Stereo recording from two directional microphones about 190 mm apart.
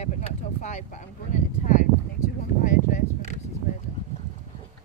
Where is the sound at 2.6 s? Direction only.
40° left (ahead or behind).